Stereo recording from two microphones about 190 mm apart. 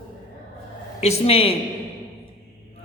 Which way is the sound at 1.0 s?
30° left (ahead or behind).